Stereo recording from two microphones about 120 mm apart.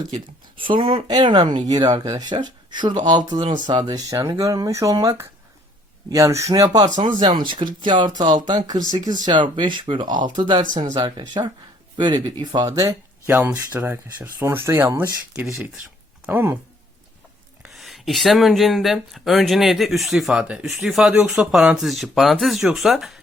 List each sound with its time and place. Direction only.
0.1 s speech: 45° right (ahead or behind); by 15.0 s 20° right (ahead or behind)
16.2 s speech: 15° right (ahead or behind)
17.6 s speech: centre (ahead or behind)